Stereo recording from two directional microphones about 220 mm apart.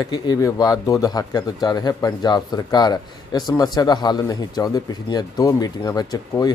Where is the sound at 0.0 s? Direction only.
15° left (ahead or behind).